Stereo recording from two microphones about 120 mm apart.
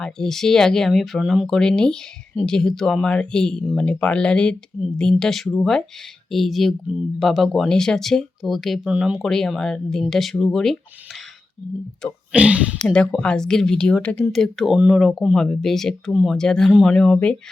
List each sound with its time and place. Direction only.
0.0 s speech: 5° left (ahead or behind)
12.3 s speech: 10° right (ahead or behind)
12.8 s speech: 5° left (ahead or behind)